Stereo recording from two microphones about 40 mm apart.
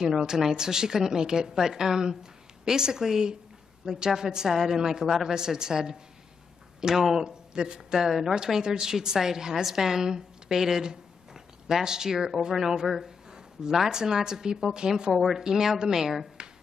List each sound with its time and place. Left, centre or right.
0.0 s a woman's voice: centre
7.0 s speech: centre
7.2 s speech: right
7.9 s a woman's voice: centre